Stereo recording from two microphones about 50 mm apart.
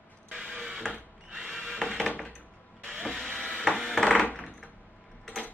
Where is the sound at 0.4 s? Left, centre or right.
Centre.